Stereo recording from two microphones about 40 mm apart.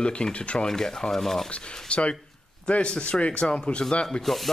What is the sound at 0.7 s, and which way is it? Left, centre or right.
Speech, centre.